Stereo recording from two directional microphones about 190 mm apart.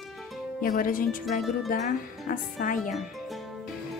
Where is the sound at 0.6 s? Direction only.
50° left (ahead or behind).